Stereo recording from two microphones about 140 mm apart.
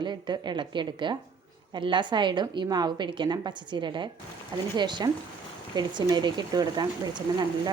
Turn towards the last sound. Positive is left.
turn(degrees=-30)  # may be behind; listen again after turning